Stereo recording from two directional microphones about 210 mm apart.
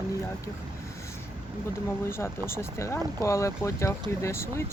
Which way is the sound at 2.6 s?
15° left (ahead or behind).